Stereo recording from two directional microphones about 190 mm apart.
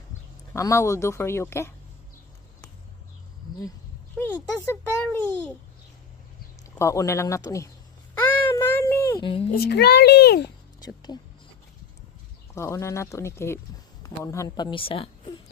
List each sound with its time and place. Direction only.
0.5 s a child's voice: 15° left (ahead or behind)
4.2 s a child's voice: 10° left (ahead or behind)
6.7 s a child's voice: 15° left (ahead or behind)
8.4 s a sound: 10° left (ahead or behind)
9.2 s a woman's voice: 30° left (ahead or behind)
9.5 s a child's voice: 60° left (ahead or behind)
10.8 s a sound: 20° left (ahead or behind)
12.5 s a child's voice: 15° left (ahead or behind)